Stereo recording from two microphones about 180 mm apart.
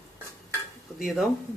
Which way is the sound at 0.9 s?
Centre (ahead or behind).